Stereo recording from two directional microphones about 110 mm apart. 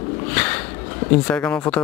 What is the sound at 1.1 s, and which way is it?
Speech, 10° left (ahead or behind).